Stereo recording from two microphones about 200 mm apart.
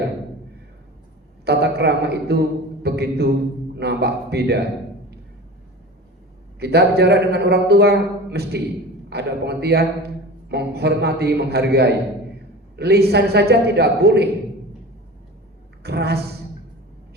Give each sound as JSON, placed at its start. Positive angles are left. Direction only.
{"t": 1.5, "sound": "a man's voice", "side_deg": -55}
{"t": 6.6, "sound": "a man's voice", "side_deg": -55}
{"t": 15.8, "sound": "a woman's voice", "side_deg": -55}